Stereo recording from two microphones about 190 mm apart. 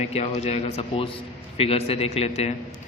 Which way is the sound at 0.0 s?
35° left (ahead or behind).